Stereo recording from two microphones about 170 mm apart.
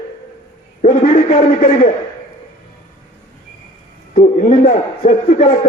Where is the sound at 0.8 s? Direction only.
55° left (ahead or behind).